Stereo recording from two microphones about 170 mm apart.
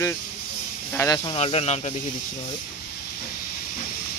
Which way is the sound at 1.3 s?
35° left (ahead or behind).